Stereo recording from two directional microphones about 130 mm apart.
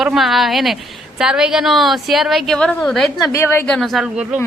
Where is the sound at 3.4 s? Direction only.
20° left (ahead or behind).